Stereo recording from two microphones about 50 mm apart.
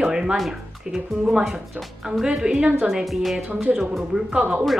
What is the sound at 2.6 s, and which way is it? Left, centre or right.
Speech, right.